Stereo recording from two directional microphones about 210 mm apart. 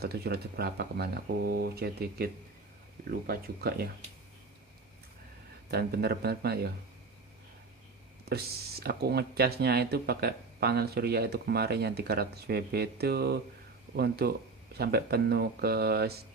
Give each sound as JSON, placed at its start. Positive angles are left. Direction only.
{"t": 0.0, "sound": "speech", "side_deg": -50}
{"t": 5.7, "sound": "speech", "side_deg": -50}
{"t": 8.3, "sound": "speech", "side_deg": -50}